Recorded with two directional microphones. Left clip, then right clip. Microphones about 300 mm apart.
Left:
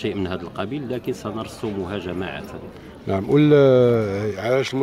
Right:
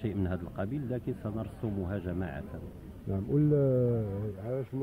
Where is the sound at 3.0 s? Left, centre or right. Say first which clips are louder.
Left 13 dB; left.